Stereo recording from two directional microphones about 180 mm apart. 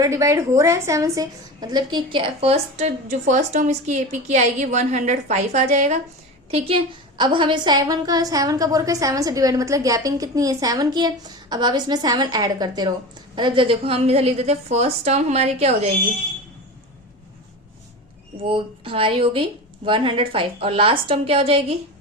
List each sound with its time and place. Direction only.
0.0 s a woman's voice: 15° right (ahead or behind); by 16.0 s 35° right (ahead or behind)
18.3 s a woman's voice: 30° right (ahead or behind)